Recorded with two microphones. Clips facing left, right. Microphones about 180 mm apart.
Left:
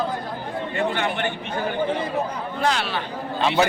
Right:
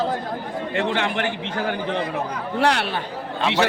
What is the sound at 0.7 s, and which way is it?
A man's voice, 90° right.